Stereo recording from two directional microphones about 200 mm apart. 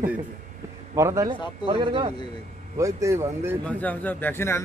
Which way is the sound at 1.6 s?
25° right (ahead or behind).